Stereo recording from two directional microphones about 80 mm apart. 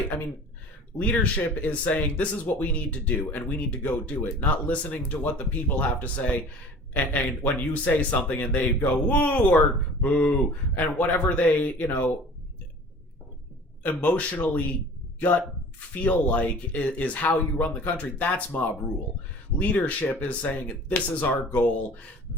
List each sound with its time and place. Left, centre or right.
0.9 s speech: centre
13.8 s speech: left